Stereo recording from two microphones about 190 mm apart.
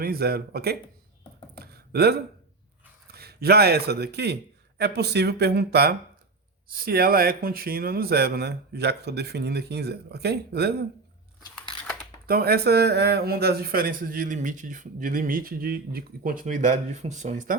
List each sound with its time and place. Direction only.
0.0 s speech: 55° right (ahead or behind)
1.5 s a sound: 55° right (ahead or behind)
3.1 s speech: 55° right (ahead or behind)
12.2 s speech: 50° right (ahead or behind)